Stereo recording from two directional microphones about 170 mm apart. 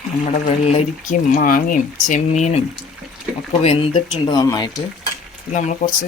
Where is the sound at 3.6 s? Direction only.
35° left (ahead or behind).